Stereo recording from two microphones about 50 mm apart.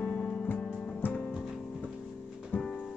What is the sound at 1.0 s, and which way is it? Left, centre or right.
Music, left.